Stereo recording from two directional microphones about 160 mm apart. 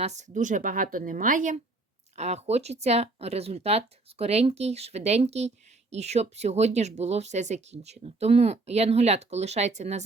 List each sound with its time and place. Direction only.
0.0 s speech: 45° right (ahead or behind)